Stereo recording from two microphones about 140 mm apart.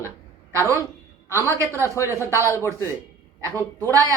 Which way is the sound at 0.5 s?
20° right (ahead or behind).